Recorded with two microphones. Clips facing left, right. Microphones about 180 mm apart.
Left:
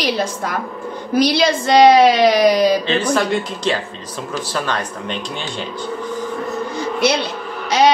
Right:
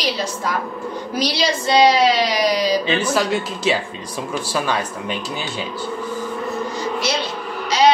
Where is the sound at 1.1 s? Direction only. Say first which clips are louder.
Left 6 dB; 55° left (ahead or behind).